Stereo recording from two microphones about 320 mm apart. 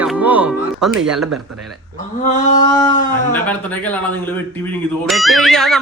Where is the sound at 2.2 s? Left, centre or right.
Left.